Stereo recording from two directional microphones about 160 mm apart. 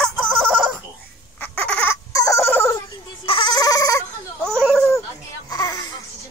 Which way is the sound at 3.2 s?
30° left (ahead or behind).